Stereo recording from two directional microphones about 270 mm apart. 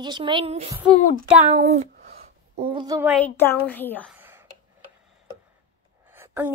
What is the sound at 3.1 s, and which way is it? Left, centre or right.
A child's voice, centre.